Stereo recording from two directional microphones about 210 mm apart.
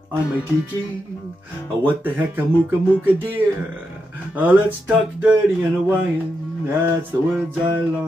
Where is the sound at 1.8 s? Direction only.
10° right (ahead or behind).